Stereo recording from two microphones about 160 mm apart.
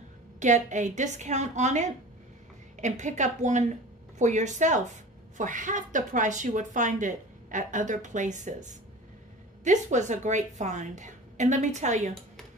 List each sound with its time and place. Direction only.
0.4 s speech: 50° right (ahead or behind)